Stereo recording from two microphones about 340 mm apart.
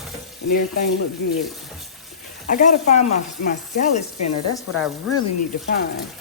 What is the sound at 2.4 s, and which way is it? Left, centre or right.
Speech, left.